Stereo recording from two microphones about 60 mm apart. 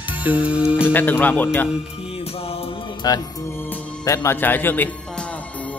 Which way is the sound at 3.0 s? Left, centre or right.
Left.